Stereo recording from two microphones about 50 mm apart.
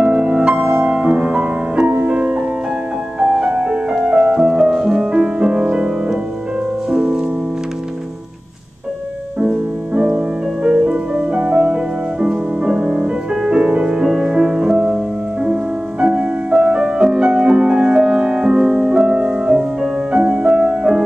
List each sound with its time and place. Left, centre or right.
0.0 s music: right
9.9 s music: centre
20.1 s music: right